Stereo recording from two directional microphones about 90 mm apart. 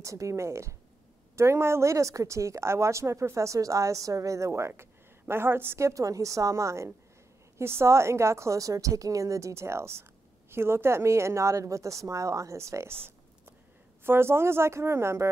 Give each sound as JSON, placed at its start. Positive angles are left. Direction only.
{"t": 0.0, "sound": "speech", "side_deg": -35}